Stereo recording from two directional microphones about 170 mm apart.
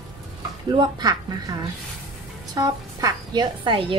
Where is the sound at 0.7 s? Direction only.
25° right (ahead or behind).